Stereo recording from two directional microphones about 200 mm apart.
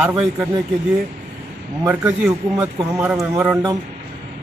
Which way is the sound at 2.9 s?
10° right (ahead or behind).